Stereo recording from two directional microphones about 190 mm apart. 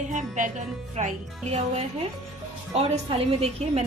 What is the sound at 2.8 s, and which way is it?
A woman's voice, 30° right (ahead or behind).